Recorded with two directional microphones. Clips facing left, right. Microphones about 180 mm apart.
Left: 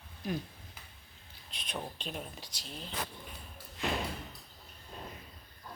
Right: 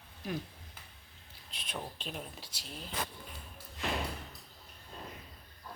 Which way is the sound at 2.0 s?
Centre (ahead or behind).